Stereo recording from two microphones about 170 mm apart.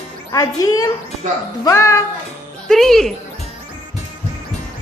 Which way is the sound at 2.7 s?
Centre (ahead or behind).